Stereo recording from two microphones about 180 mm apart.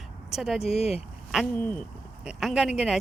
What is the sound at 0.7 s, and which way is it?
Speech, 35° left (ahead or behind).